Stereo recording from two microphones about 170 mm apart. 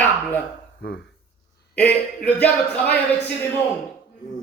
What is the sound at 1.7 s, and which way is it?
A man's voice, 10° left (ahead or behind).